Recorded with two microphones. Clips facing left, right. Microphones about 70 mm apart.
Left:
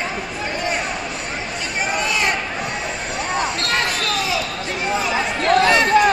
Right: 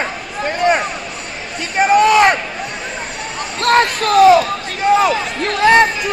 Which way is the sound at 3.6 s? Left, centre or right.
Right.